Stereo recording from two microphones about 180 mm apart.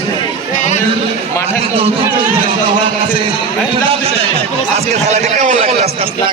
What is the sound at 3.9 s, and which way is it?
A man's voice, 35° right (ahead or behind).